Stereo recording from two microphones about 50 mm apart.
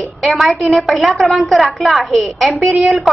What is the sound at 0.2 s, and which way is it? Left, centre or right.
A woman's voice, centre.